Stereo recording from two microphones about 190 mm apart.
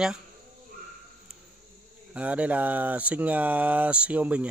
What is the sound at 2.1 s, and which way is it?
Speech, 5° right (ahead or behind).